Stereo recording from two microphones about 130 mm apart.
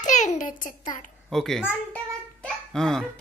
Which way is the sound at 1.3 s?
Centre (ahead or behind).